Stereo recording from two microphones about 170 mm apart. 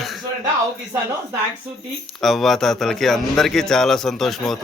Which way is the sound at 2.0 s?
Centre (ahead or behind).